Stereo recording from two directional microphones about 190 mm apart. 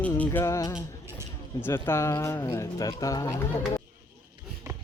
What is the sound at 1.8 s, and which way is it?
Speech, 15° left (ahead or behind).